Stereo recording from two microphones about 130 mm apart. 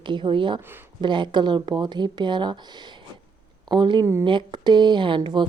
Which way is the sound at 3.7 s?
35° right (ahead or behind).